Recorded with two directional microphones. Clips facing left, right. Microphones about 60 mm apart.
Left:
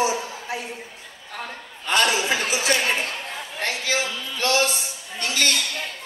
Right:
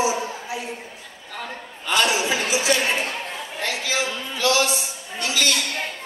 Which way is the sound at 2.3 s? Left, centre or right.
Left.